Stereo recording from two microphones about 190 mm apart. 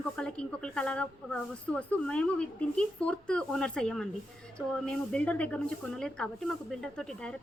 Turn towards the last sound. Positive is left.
turn(degrees=0)  # may be behind; listen again after turning